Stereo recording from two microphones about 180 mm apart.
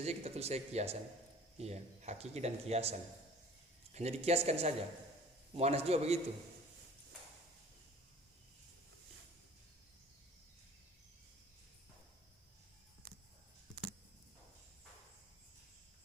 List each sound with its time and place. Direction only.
0.0 s speech: 35° right (ahead or behind)